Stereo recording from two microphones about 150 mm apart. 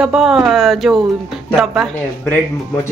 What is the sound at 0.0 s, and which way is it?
Speech, 5° right (ahead or behind).